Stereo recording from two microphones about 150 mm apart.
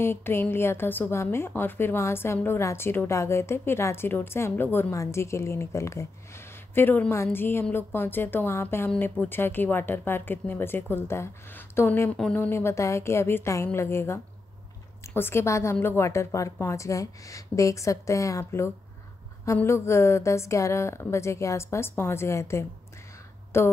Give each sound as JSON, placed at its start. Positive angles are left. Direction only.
{"t": 0.0, "sound": "a woman's voice", "side_deg": 15}